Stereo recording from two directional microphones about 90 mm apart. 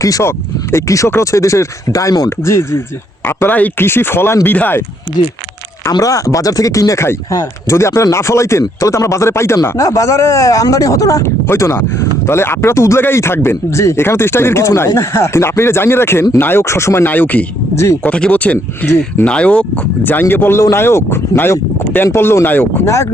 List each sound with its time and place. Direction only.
0.0 s speech: 35° left (ahead or behind)
3.2 s speech: 20° left (ahead or behind)
5.9 s speech: 40° left (ahead or behind)